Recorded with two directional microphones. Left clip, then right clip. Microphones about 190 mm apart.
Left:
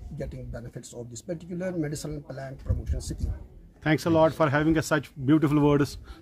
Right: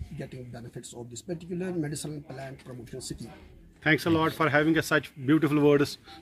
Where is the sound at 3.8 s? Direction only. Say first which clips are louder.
Left 3 dB; 70° left (ahead or behind).